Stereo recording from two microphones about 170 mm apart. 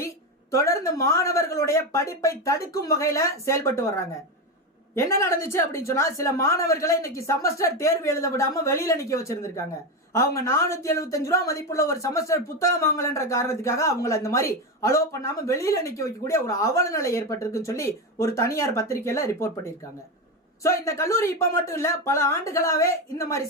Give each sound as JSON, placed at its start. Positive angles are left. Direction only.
{"t": 0.5, "sound": "speech", "side_deg": 15}